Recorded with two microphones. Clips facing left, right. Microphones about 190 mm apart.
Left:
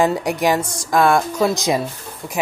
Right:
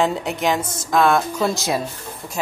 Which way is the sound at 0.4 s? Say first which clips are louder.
Left 3 dB; centre (ahead or behind).